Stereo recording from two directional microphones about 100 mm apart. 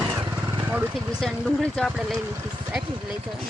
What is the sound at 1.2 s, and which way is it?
Speech, 5° left (ahead or behind).